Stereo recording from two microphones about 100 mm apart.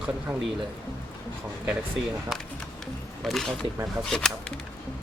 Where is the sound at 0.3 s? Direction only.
15° right (ahead or behind).